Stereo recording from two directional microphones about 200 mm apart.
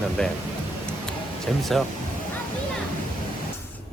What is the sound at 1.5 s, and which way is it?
Speech, centre (ahead or behind).